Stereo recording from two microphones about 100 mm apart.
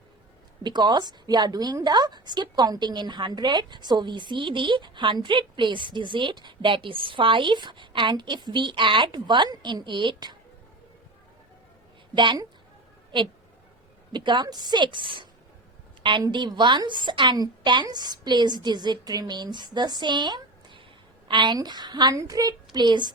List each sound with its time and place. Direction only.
0.6 s a woman's voice: 45° right (ahead or behind)
12.1 s a woman's voice: 50° right (ahead or behind)
14.1 s a woman's voice: 50° right (ahead or behind)
16.3 s a woman's voice: 50° right (ahead or behind)
22.1 s a woman's voice: 35° right (ahead or behind)
22.7 s a woman's voice: 50° right (ahead or behind)